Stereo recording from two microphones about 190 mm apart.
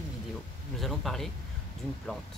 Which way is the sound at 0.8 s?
Centre (ahead or behind).